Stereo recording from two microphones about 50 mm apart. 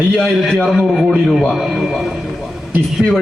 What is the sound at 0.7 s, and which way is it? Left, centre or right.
A man's voice, centre.